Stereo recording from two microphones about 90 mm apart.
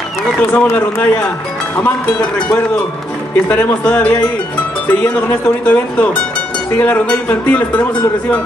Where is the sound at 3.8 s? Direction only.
20° left (ahead or behind).